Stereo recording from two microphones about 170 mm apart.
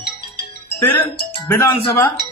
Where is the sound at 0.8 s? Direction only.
10° left (ahead or behind).